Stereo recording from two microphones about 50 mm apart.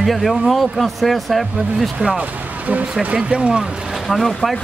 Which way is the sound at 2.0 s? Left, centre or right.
Centre.